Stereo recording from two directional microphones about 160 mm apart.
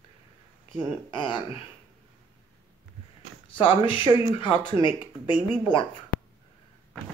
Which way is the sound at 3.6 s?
30° left (ahead or behind).